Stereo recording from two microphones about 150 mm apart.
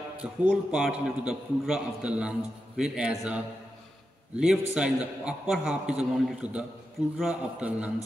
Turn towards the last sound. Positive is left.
turn(degrees=-5)  # may be behind; listen again after turning